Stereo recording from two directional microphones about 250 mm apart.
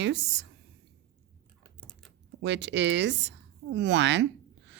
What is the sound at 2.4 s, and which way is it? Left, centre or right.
A woman's voice, right.